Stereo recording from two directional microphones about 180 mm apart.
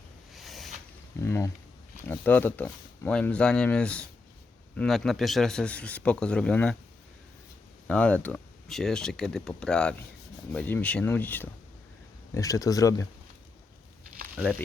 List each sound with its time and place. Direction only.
0.3 s a sound: centre (ahead or behind)
1.2 s speech: 15° left (ahead or behind)
7.9 s speech: 5° left (ahead or behind)
14.5 s speech: 5° left (ahead or behind)